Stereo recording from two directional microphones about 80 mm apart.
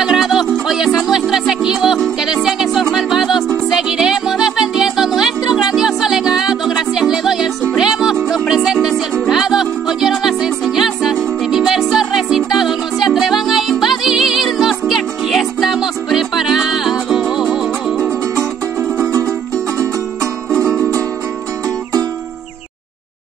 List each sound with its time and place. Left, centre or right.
0.0 s music: centre
18.3 s music: right
20.5 s music: centre